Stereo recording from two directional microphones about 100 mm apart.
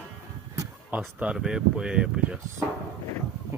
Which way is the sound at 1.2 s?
10° right (ahead or behind).